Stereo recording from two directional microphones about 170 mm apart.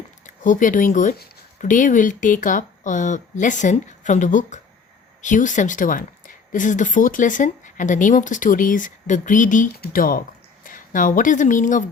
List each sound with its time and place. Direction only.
0.3 s speech: 50° left (ahead or behind)
1.1 s a sound: 65° left (ahead or behind)
1.6 s speech: 50° left (ahead or behind)